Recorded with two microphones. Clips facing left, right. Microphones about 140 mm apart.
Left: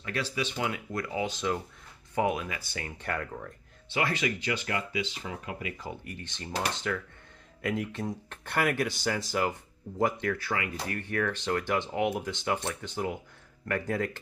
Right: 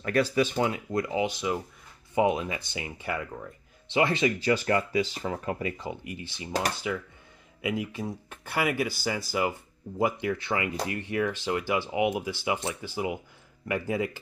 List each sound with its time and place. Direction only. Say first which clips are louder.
0.0 s speech: right 8 dB; 45° right (ahead or behind)
0.7 s speech: right 5 dB; 25° right (ahead or behind)
2.1 s speech: right 4 dB; 25° right (ahead or behind)
2.8 s speech: even; 5° right (ahead or behind)
3.9 s speech: right 5 dB; 25° right (ahead or behind)
5.8 s speech: right 3 dB; 15° right (ahead or behind)
10.3 s speech: right 3 dB; 20° right (ahead or behind)